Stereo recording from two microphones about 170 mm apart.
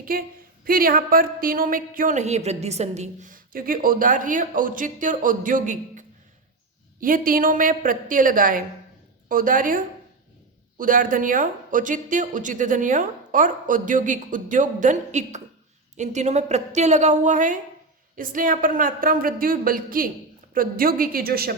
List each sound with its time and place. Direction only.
0.0 s a woman's voice: 60° right (ahead or behind)